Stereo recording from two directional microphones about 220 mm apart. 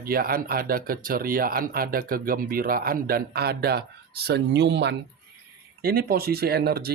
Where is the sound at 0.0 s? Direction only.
40° right (ahead or behind).